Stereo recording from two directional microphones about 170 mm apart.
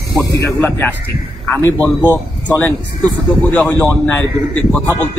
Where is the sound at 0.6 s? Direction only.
10° left (ahead or behind).